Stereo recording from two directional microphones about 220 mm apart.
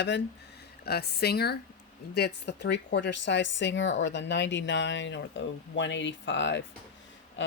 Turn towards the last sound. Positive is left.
turn(degrees=55)  # may be behind; listen again after turning